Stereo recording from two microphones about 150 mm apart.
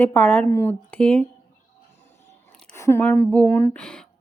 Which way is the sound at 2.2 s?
15° left (ahead or behind).